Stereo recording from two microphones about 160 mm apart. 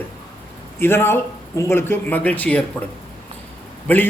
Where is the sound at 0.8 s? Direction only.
15° left (ahead or behind).